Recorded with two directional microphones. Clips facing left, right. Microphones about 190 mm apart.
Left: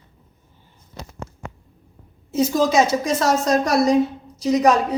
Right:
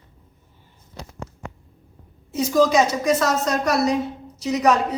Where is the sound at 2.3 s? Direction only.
30° left (ahead or behind).